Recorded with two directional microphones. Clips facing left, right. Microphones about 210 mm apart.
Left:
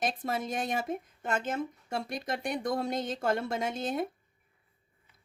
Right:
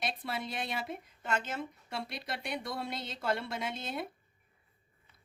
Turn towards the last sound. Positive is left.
turn(degrees=45)  # may be behind; listen again after turning